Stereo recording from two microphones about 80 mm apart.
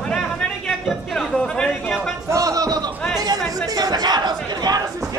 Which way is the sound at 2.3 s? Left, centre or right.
Right.